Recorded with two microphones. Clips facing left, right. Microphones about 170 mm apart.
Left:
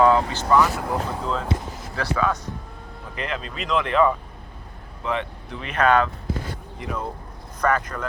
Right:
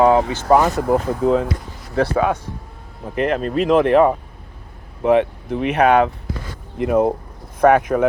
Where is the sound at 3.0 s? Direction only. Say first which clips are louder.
Right 11 dB; 55° right (ahead or behind).